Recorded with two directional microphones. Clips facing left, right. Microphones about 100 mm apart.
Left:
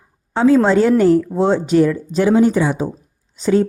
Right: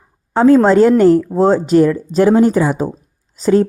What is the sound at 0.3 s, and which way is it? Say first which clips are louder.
A woman's voice: right 4 dB; 45° right (ahead or behind).